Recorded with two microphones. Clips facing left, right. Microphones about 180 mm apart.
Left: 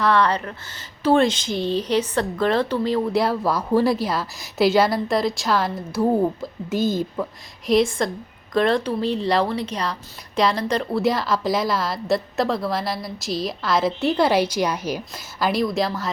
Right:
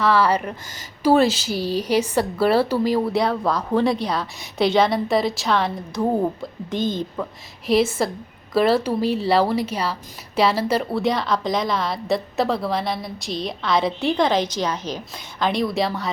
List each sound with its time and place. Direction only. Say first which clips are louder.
0.0 s a woman's voice: right 1 dB; 5° right (ahead or behind)
3.1 s a woman's voice: even; centre (ahead or behind)
7.7 s a woman's voice: even; 5° right (ahead or behind)